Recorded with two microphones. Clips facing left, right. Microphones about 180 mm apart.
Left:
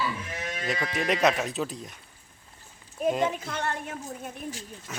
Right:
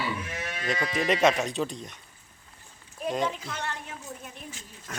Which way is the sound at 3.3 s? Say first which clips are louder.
Left 4 dB; 50° left (ahead or behind).